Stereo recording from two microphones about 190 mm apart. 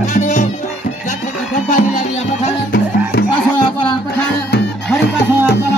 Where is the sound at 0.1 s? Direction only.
40° left (ahead or behind).